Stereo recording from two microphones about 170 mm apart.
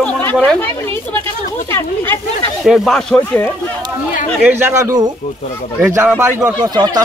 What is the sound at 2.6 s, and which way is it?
Speech, centre (ahead or behind).